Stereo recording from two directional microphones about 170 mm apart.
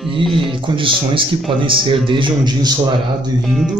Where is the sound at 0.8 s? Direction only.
30° right (ahead or behind).